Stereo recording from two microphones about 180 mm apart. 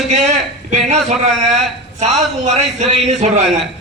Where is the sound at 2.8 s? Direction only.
40° right (ahead or behind).